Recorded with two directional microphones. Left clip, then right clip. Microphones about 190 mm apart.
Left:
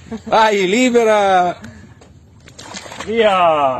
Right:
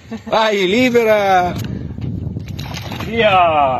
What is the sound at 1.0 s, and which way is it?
Speech, 5° left (ahead or behind).